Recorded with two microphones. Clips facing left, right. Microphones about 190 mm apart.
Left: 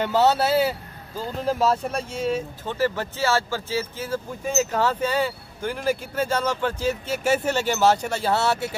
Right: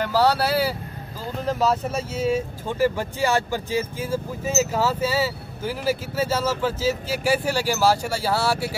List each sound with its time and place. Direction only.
0.0 s speech: 25° left (ahead or behind)
1.4 s speech: 5° left (ahead or behind)
8.3 s speech: 20° left (ahead or behind)